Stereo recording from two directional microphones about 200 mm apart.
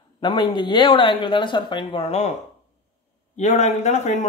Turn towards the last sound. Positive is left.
turn(degrees=35)  # may be behind; listen again after turning